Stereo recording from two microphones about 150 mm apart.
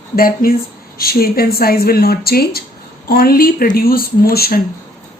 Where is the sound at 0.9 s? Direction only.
90° left.